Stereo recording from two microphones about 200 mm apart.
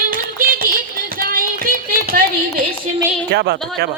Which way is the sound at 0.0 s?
45° right (ahead or behind).